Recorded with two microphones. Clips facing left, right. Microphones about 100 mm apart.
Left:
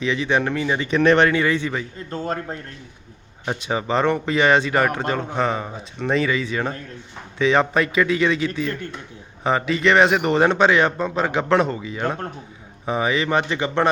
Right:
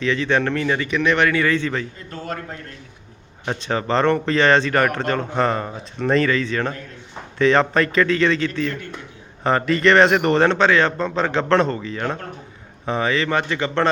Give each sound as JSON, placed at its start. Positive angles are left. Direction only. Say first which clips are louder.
{"t": 0.0, "sound": "speech", "louder": "right 1 dB", "side_deg": 15}
{"t": 0.8, "sound": "speech", "louder": "left 7 dB", "side_deg": 35}
{"t": 2.0, "sound": "speech", "louder": "left 3 dB", "side_deg": 30}
{"t": 3.4, "sound": "speech", "louder": "right 1 dB", "side_deg": 10}